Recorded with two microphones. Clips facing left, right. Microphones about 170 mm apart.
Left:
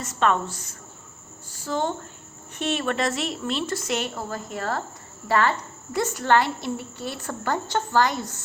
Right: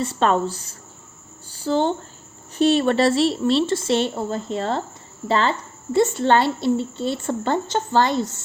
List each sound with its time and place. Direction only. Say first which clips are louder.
0.0 s a woman's voice: right 4 dB; 30° right (ahead or behind)